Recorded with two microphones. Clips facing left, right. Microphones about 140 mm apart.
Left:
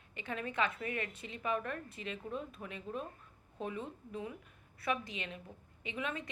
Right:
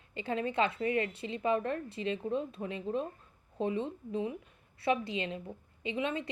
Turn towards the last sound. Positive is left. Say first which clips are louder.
# right 6 dB
turn(degrees=-30)  # may be behind; listen again after turning